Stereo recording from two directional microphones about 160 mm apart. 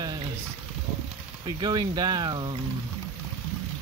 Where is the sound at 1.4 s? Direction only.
30° right (ahead or behind).